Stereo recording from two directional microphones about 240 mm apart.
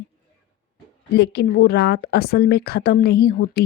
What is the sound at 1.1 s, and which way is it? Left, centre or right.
A woman's voice, left.